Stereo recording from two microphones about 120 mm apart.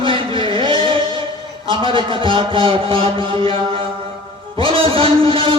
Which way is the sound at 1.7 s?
45° right (ahead or behind).